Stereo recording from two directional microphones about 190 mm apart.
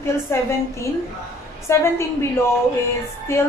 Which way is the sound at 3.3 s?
15° left (ahead or behind).